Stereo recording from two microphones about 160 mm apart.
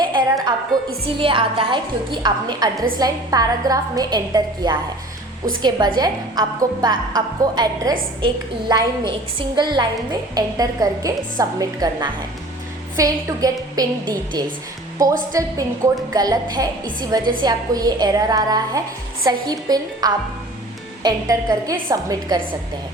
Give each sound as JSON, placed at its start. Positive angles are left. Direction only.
{"t": 0.0, "sound": "music", "side_deg": -30}
{"t": 1.0, "sound": "a woman's voice", "side_deg": -35}
{"t": 6.0, "sound": "a woman's voice", "side_deg": -25}